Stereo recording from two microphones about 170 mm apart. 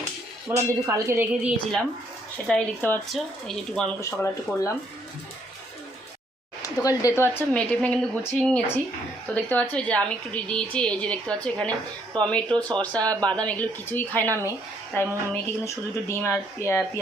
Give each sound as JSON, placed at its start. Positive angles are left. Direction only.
{"t": 0.5, "sound": "speech", "side_deg": -15}
{"t": 2.5, "sound": "a woman's voice", "side_deg": 10}
{"t": 4.0, "sound": "a woman's voice", "side_deg": 15}
{"t": 6.8, "sound": "a woman's voice", "side_deg": 15}
{"t": 13.0, "sound": "speech", "side_deg": -25}
{"t": 13.2, "sound": "a woman's voice", "side_deg": 5}